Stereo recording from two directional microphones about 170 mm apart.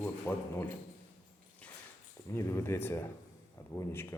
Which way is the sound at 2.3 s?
15° left (ahead or behind).